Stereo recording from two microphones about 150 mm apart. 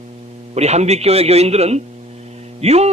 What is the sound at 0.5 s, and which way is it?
Speech, 45° right (ahead or behind).